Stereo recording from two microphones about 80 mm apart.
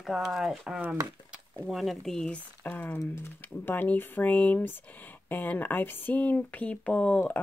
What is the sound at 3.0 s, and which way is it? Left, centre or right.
Speech, left.